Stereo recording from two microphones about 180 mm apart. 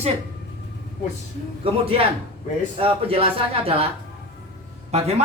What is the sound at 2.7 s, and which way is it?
Speech, 30° right (ahead or behind).